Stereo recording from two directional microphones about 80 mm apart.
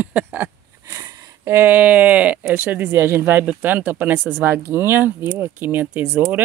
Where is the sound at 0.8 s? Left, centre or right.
Right.